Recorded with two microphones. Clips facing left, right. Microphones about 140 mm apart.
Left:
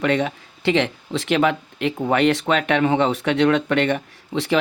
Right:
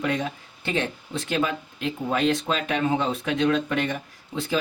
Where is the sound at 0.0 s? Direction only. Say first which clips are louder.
Left 6 dB; 70° left (ahead or behind).